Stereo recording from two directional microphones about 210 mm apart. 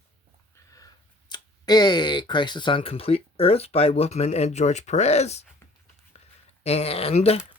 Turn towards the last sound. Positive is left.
turn(degrees=30)  # may be behind; listen again after turning